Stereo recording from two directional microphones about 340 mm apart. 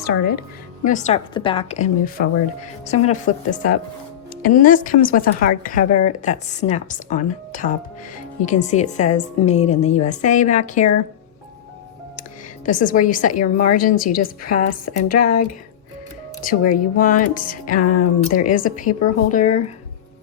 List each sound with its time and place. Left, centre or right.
0.0 s a woman's voice: left
12.6 s a woman's voice: left
16.5 s a woman's voice: left
17.8 s speech: left
18.4 s a woman's voice: left